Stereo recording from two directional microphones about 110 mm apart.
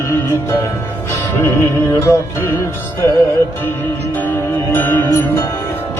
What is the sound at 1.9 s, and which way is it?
Music, 25° left (ahead or behind).